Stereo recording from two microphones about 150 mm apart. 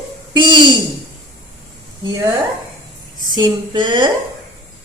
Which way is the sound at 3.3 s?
30° right (ahead or behind).